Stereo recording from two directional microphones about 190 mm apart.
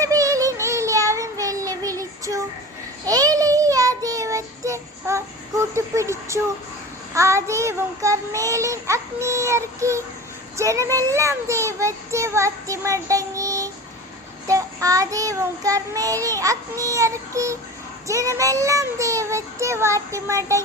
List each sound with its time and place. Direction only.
0.0 s child singing: 15° right (ahead or behind)
10.6 s a child's voice: 15° right (ahead or behind)
14.4 s child singing: 15° right (ahead or behind)